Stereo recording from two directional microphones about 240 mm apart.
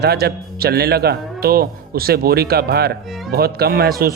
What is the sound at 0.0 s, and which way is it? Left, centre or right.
Speech, right.